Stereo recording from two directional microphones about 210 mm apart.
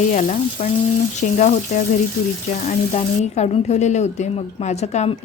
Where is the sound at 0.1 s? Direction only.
35° left (ahead or behind).